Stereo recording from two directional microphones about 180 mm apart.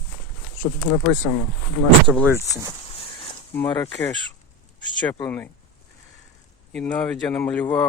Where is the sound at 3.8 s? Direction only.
10° left (ahead or behind).